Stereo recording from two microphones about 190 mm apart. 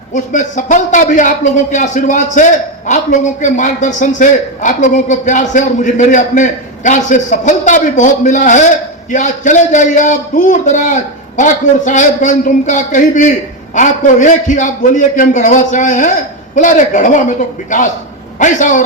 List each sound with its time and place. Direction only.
0.1 s a man's voice: 40° left (ahead or behind)